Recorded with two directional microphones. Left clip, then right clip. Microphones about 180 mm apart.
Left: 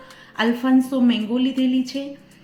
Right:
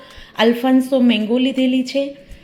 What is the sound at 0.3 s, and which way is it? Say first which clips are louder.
A woman's voice: right 5 dB; 15° right (ahead or behind).